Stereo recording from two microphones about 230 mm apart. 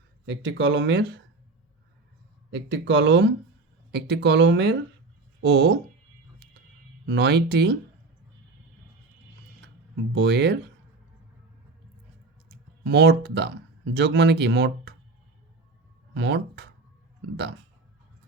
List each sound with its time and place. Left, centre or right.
0.3 s speech: right
2.5 s speech: right
7.0 s speech: right
10.2 s speech: right
12.5 s speech: right
16.1 s speech: right